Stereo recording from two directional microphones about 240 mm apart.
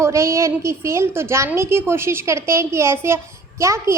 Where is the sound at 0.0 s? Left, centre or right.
Centre.